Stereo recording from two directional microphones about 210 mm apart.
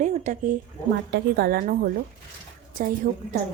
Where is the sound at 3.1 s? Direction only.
40° right (ahead or behind).